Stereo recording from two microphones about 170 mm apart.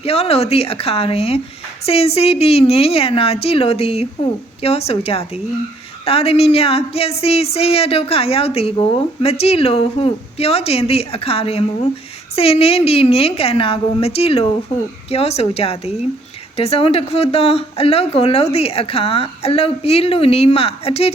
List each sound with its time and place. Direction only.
0.0 s speech: 35° left (ahead or behind)